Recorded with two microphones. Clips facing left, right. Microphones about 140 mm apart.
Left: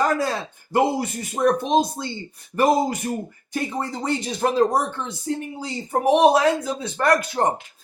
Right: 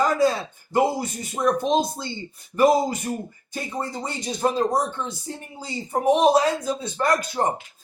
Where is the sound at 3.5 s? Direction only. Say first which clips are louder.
Left 3 dB; 60° left (ahead or behind).